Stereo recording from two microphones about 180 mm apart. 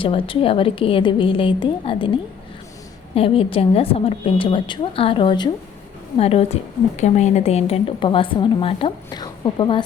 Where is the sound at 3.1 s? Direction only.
30° left (ahead or behind).